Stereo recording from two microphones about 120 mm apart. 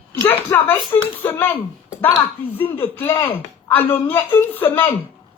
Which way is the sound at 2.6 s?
15° left (ahead or behind).